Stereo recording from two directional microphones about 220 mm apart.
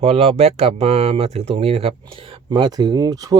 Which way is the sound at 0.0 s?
25° right (ahead or behind).